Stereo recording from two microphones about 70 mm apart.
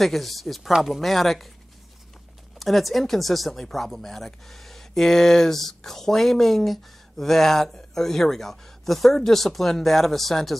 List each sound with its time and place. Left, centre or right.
0.0 s speech: centre
2.6 s speech: centre